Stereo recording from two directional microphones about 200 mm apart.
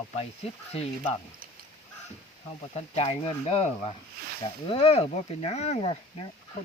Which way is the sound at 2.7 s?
30° left (ahead or behind).